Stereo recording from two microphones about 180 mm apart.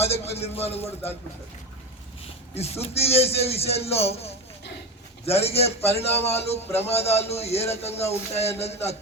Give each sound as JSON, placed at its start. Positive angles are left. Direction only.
{"t": 0.0, "sound": "speech", "side_deg": 35}
{"t": 2.6, "sound": "speech", "side_deg": 35}